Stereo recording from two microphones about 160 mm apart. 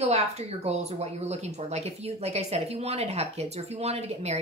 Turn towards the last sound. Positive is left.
turn(degrees=-40)  # may be behind; listen again after turning